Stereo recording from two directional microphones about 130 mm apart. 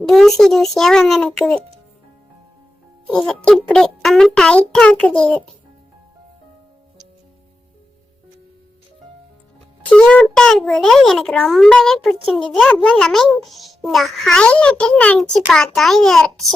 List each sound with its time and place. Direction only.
0.1 s a child's voice: centre (ahead or behind)
3.1 s a child's voice: 5° left (ahead or behind)
9.9 s a child's voice: 10° left (ahead or behind)